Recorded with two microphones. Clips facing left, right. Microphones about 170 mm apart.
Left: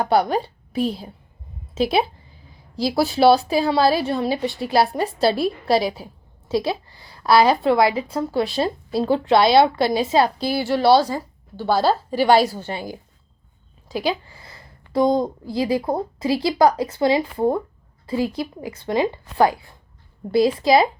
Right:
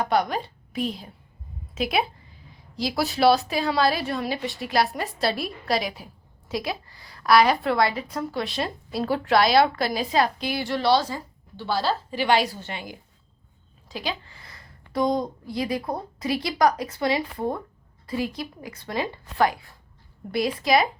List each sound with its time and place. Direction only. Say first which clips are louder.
0.0 s a woman's voice: left 5 dB; 30° left (ahead or behind)
14.3 s a sound: left 4 dB; 25° left (ahead or behind)
15.5 s a woman's voice: left 6 dB; 30° left (ahead or behind)